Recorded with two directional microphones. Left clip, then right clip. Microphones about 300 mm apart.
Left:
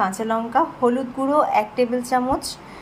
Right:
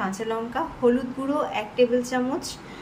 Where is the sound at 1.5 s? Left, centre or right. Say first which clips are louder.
Left 2 dB; centre.